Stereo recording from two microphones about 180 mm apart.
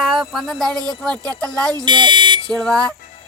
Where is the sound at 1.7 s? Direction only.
25° right (ahead or behind).